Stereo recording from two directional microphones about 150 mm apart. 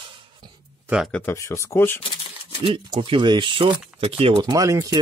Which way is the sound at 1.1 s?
15° left (ahead or behind).